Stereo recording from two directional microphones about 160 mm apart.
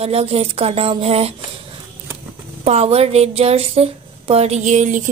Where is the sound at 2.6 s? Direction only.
40° right (ahead or behind).